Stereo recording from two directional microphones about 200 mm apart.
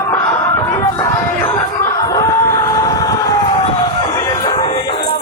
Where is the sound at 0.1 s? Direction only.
15° left (ahead or behind).